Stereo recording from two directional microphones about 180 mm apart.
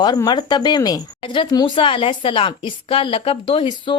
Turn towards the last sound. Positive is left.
turn(degrees=30)  # may be behind; listen again after turning